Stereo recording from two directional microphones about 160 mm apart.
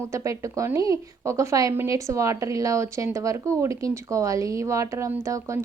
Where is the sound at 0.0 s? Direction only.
20° right (ahead or behind).